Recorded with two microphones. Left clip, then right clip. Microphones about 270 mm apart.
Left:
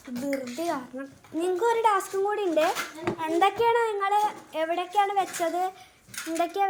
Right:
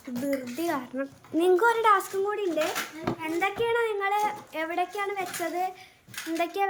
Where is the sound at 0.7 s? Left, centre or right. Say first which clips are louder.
Right 1 dB; centre.